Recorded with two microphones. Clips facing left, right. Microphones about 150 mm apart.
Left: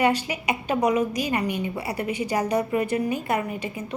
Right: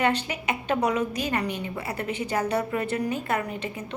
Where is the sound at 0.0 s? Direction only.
10° left (ahead or behind).